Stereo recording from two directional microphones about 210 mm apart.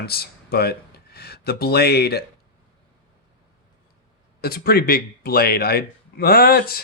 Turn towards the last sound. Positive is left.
turn(degrees=45)  # may be behind; listen again after turning